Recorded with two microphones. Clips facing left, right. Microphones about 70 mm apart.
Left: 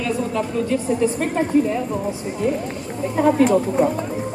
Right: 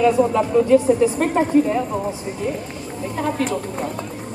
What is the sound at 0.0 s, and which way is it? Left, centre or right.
Speech, centre.